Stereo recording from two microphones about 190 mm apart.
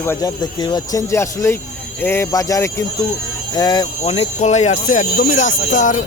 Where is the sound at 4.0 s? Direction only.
35° left (ahead or behind).